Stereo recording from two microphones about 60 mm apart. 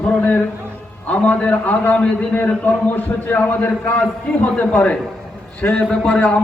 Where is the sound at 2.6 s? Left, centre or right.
Left.